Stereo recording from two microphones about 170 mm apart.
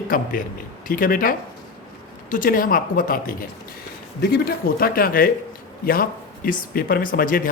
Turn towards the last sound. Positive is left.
turn(degrees=55)  # may be behind; listen again after turning